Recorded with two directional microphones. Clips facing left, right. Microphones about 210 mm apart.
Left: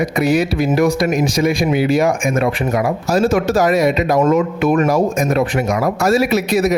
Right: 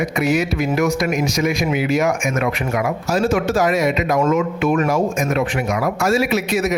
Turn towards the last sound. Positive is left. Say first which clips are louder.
# left 4 dB
turn(degrees=35)  # may be behind; listen again after turning